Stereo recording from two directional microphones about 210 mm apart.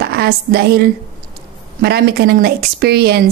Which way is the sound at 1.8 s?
50° right (ahead or behind).